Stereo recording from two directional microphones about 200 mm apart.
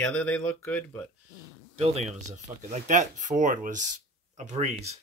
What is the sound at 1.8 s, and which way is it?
Speech, 35° right (ahead or behind).